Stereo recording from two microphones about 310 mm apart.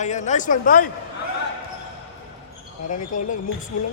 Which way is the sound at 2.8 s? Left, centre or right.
Left.